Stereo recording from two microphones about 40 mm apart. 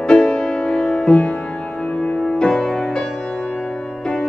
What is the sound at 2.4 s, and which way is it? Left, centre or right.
Music, centre.